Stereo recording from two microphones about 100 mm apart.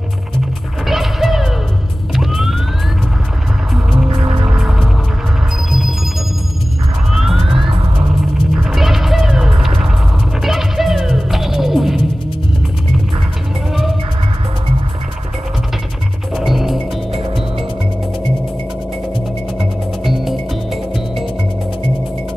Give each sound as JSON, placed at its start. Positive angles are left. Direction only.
{"t": 0.8, "sound": "music", "side_deg": 0}
{"t": 2.1, "sound": "police car", "side_deg": -5}
{"t": 4.1, "sound": "music", "side_deg": -65}
{"t": 4.5, "sound": "music", "side_deg": -5}
{"t": 7.3, "sound": "police car", "side_deg": -60}
{"t": 8.6, "sound": "music", "side_deg": -5}
{"t": 16.3, "sound": "music", "side_deg": 0}
{"t": 19.6, "sound": "music", "side_deg": 0}